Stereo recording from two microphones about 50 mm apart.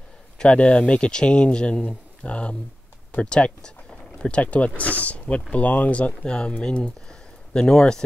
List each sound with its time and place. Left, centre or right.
0.4 s speech: left